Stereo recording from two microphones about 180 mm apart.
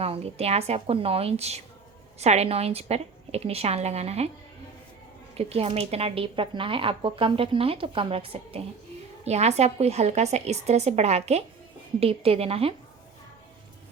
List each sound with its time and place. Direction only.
0.0 s a woman's voice: 35° right (ahead or behind)
5.4 s a woman's voice: 35° right (ahead or behind)